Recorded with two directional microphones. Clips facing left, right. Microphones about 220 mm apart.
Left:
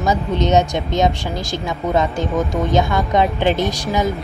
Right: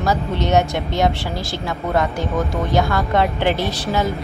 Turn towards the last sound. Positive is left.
turn(degrees=15)  # may be behind; listen again after turning